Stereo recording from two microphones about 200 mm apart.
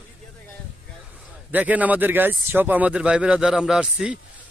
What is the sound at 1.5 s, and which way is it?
Speech, 10° right (ahead or behind).